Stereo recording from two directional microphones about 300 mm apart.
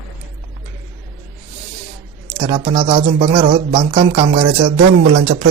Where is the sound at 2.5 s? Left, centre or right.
Right.